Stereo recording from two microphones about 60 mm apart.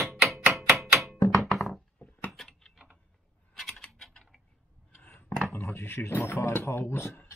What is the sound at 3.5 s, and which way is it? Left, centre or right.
Typing, centre.